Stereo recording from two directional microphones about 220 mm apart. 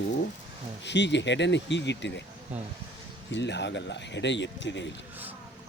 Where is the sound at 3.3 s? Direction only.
50° left (ahead or behind).